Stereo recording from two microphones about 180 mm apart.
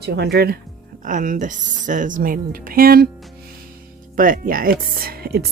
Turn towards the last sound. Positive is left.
turn(degrees=-60)  # may be behind; listen again after turning